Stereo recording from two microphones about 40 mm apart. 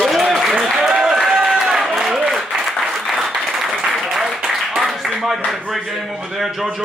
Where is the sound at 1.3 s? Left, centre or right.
Right.